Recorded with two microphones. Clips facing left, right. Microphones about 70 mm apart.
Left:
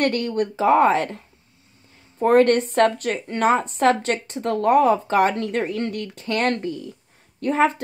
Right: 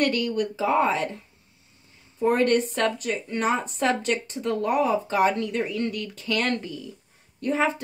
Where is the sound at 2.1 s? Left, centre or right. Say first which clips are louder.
Left 5 dB; left.